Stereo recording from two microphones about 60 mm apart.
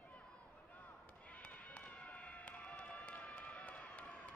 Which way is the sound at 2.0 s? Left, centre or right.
Left.